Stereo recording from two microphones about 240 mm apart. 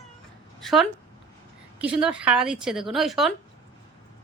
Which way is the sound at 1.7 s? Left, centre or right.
Centre.